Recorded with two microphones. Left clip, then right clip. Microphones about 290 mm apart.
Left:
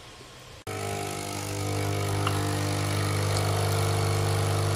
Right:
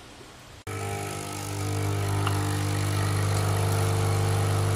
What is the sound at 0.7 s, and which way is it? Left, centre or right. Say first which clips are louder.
Vehicle: left 1 dB; centre.